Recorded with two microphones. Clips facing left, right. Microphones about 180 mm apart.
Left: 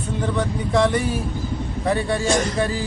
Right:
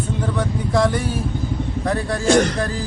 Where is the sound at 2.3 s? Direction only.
70° right (ahead or behind).